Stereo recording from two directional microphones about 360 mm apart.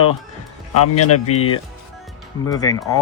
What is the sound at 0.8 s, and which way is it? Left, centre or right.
Speech, left.